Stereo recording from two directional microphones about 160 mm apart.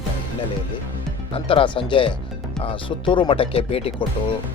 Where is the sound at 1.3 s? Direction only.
35° left (ahead or behind).